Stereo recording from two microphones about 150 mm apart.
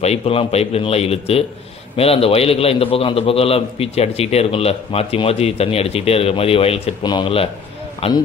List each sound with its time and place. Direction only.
0.0 s a man's voice: 40° left (ahead or behind)